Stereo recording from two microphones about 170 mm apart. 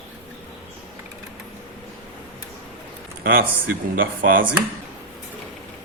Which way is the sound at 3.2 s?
60° right (ahead or behind).